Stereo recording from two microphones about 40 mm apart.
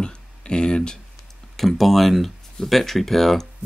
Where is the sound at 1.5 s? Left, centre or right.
Centre.